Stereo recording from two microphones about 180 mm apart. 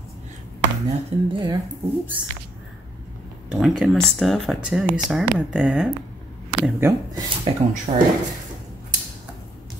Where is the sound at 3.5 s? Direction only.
5° right (ahead or behind).